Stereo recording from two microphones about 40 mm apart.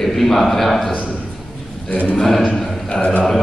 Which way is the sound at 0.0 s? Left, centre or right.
Centre.